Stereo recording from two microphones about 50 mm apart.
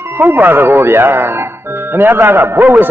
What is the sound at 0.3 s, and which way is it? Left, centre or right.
A man's voice, right.